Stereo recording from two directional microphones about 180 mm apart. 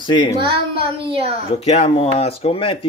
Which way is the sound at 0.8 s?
30° right (ahead or behind).